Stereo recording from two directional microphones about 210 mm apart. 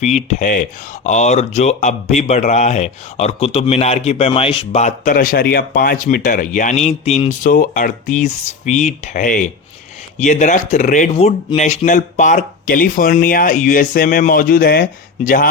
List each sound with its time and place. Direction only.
0.0 s speech: 30° left (ahead or behind)